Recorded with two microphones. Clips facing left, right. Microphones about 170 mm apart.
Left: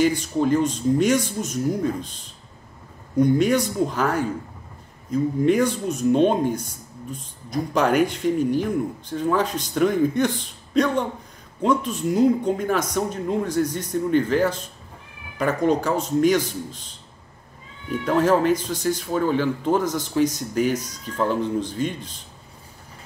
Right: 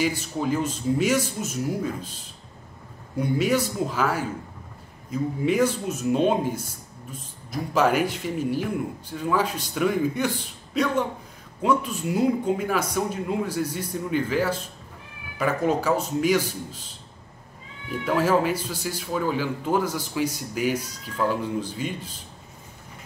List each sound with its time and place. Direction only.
0.0 s speech: 5° right (ahead or behind)
3.2 s speech: 5° right (ahead or behind)
18.0 s speech: 5° right (ahead or behind)